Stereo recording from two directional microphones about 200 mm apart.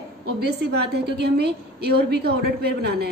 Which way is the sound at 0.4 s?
55° right (ahead or behind).